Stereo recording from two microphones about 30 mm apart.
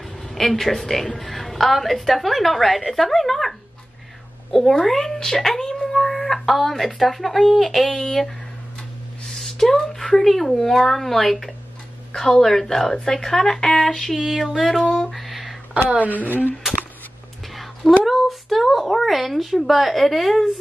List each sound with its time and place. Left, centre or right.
0.0 s a woman's voice: centre
9.4 s a sound: centre
10.1 s a woman's voice: centre
12.8 s speech: left
14.1 s a sound: centre
14.6 s a woman's voice: centre
15.0 s a sound: centre
16.0 s speech: left
18.0 s a woman's voice: centre